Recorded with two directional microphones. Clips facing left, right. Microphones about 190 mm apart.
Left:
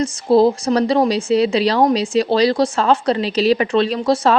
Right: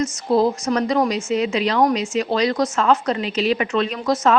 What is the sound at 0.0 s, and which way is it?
Speech, 30° left (ahead or behind).